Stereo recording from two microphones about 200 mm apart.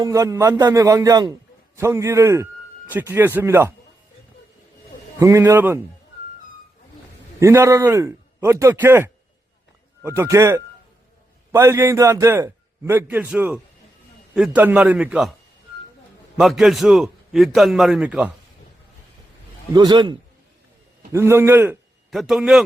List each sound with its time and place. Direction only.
0.0 s a man's voice: 15° right (ahead or behind)
5.2 s a man's voice: 15° right (ahead or behind)
7.3 s a man's voice: 15° right (ahead or behind)
16.4 s a man's voice: centre (ahead or behind)
19.7 s a man's voice: 20° right (ahead or behind); by 22.6 s 5° right (ahead or behind)